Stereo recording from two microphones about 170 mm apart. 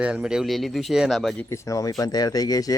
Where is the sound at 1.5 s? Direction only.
20° left (ahead or behind).